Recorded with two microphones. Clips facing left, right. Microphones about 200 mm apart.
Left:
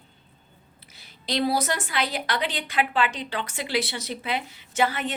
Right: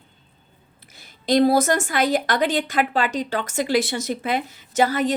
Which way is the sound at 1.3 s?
50° right (ahead or behind).